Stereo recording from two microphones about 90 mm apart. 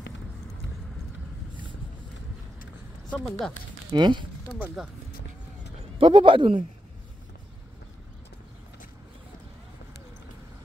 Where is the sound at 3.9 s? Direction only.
55° right (ahead or behind).